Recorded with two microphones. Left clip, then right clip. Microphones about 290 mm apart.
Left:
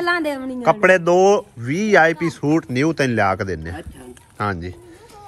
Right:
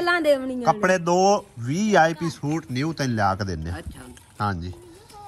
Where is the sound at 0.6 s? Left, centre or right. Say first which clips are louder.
Left 6 dB; centre.